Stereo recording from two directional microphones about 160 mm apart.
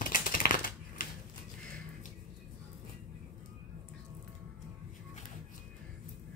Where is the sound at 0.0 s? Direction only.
60° left (ahead or behind).